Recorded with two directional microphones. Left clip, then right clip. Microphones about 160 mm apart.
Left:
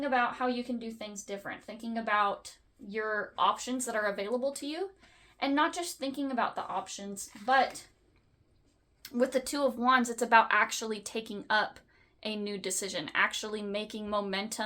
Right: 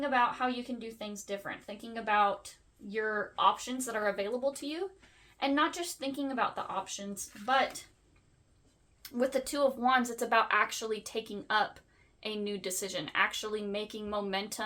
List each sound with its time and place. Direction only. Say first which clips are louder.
0.1 s a woman's voice: even; 25° left (ahead or behind)
9.0 s speech: left 2 dB; 30° left (ahead or behind)